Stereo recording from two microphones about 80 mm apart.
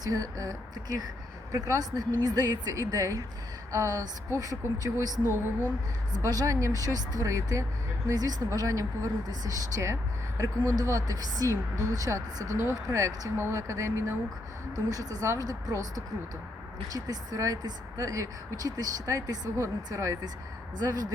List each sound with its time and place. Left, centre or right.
0.0 s speech: right
6.2 s speech: right
8.0 s speech: right
12.5 s speech: right
14.8 s speech: right
16.9 s speech: right
20.7 s speech: right